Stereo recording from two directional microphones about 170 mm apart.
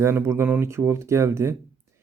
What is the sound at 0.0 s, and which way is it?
Speech, 15° right (ahead or behind).